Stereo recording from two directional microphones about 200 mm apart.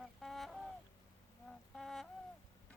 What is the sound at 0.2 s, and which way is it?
Goose, centre (ahead or behind).